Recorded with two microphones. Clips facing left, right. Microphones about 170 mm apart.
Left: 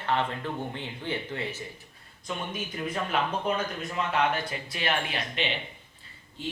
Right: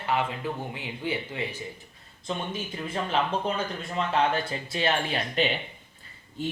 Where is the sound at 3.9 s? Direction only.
30° right (ahead or behind).